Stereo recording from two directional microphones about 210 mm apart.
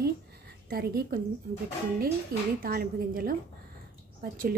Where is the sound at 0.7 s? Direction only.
45° right (ahead or behind).